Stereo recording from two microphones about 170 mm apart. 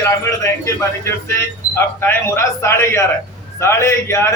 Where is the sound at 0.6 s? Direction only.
15° left (ahead or behind).